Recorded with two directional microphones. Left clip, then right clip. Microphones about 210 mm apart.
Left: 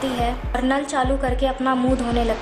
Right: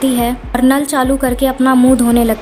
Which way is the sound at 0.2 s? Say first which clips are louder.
Right 8 dB; 40° right (ahead or behind).